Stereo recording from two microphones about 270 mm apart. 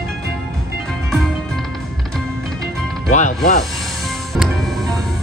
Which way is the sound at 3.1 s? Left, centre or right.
Left.